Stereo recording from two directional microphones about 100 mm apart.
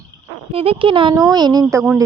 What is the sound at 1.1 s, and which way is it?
Speech, 40° right (ahead or behind).